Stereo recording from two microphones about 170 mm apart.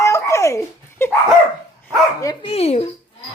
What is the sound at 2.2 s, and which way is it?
Speech, 30° left (ahead or behind).